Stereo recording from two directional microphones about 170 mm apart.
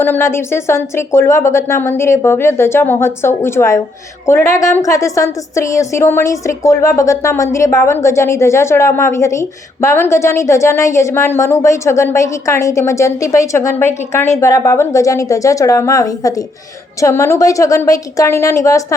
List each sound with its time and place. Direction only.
0.0 s a woman's voice: 15° left (ahead or behind)